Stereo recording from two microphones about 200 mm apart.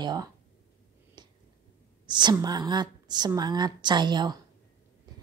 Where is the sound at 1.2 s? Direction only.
20° right (ahead or behind).